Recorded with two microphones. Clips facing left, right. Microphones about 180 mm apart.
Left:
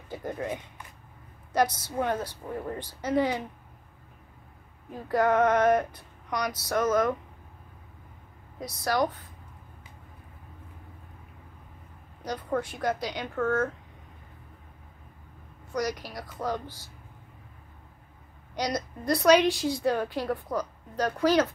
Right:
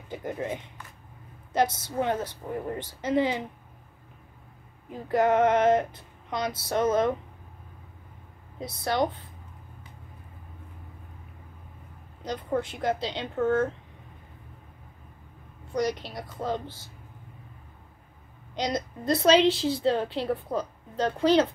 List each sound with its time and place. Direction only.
0.1 s a woman's voice: 20° right (ahead or behind)
4.8 s a woman's voice: 20° right (ahead or behind)
8.5 s a woman's voice: 25° right (ahead or behind)
12.2 s a woman's voice: 20° right (ahead or behind)
15.7 s a woman's voice: 25° right (ahead or behind)
18.5 s a woman's voice: 20° right (ahead or behind)